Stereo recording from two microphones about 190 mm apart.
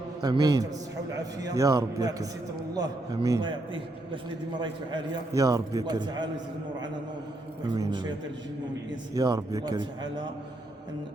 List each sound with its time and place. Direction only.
0.2 s a man's voice: 20° right (ahead or behind)
4.6 s a man's voice: 25° right (ahead or behind)
7.7 s a man's voice: 25° right (ahead or behind)
9.1 s a man's voice: 20° right (ahead or behind)